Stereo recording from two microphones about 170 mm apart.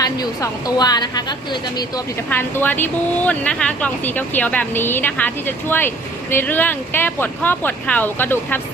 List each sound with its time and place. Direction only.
0.0 s a woman's voice: 20° left (ahead or behind)
2.3 s speech: 10° left (ahead or behind)